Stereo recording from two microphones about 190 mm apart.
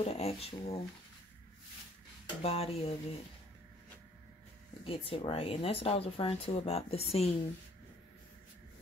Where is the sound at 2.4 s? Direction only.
30° left (ahead or behind).